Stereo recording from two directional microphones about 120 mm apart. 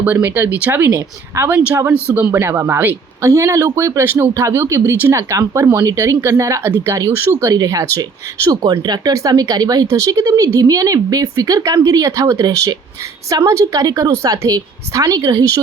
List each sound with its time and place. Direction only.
0.0 s a man's voice: 15° right (ahead or behind)
1.5 s a man's voice: 10° right (ahead or behind); by 15.6 s 30° right (ahead or behind)